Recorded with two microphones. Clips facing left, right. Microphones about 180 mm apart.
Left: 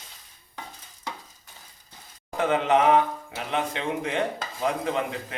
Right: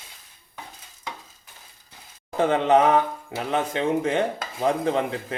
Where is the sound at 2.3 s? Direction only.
30° right (ahead or behind).